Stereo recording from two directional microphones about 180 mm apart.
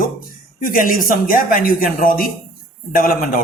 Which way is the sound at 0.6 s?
50° left (ahead or behind).